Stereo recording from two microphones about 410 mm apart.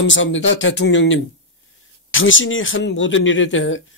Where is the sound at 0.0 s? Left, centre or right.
Left.